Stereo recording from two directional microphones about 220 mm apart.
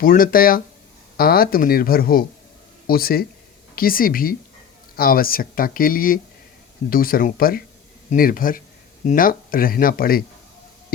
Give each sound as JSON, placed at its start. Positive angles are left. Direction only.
{"t": 0.0, "sound": "speech", "side_deg": 40}